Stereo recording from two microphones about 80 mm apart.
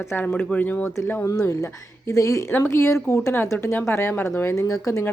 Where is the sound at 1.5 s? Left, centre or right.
Left.